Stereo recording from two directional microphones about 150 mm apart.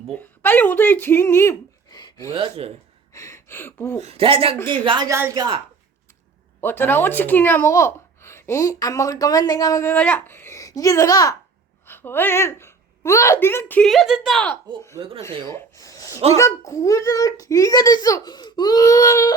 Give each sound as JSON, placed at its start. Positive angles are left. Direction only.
{"t": 0.1, "sound": "speech", "side_deg": 10}
{"t": 2.3, "sound": "speech", "side_deg": -40}
{"t": 3.1, "sound": "a sound", "side_deg": 20}
{"t": 4.0, "sound": "speech", "side_deg": -40}
{"t": 5.1, "sound": "speech", "side_deg": -20}
{"t": 6.6, "sound": "speech", "side_deg": 15}
{"t": 9.9, "sound": "a woman's voice", "side_deg": 10}
{"t": 13.8, "sound": "speech", "side_deg": 0}
{"t": 15.4, "sound": "speech", "side_deg": 20}